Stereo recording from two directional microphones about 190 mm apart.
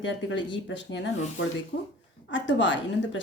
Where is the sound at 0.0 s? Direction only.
70° left (ahead or behind).